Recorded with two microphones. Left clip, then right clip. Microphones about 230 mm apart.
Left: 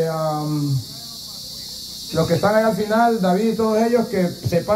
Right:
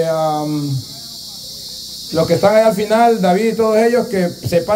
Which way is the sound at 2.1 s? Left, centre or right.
Right.